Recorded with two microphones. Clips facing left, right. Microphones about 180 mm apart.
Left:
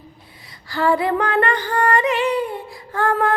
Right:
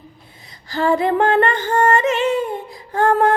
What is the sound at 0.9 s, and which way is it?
Music, 25° right (ahead or behind).